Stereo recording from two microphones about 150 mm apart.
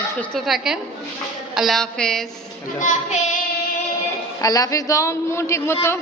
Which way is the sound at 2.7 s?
55° left (ahead or behind).